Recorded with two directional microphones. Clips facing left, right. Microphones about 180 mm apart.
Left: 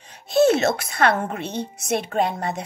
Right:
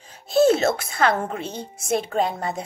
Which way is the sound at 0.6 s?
30° right (ahead or behind).